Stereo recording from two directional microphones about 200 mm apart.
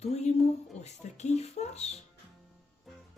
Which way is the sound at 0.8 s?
35° left (ahead or behind).